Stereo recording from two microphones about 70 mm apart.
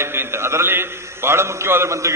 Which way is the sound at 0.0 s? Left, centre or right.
Right.